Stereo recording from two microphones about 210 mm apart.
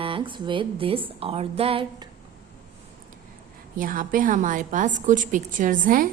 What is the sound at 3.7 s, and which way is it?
Speech, 40° right (ahead or behind).